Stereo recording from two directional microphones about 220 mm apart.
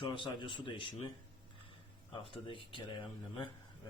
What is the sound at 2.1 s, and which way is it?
A man's voice, 25° left (ahead or behind).